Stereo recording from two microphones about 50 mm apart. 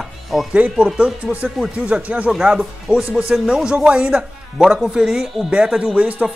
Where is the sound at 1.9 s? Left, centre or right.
Right.